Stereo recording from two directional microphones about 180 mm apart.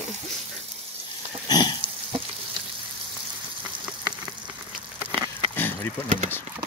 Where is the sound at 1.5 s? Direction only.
25° left (ahead or behind).